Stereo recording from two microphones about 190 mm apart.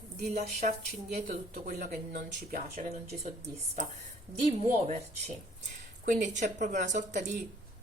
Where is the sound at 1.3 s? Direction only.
55° right (ahead or behind).